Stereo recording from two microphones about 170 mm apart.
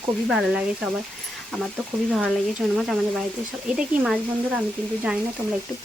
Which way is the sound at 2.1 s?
5° left (ahead or behind).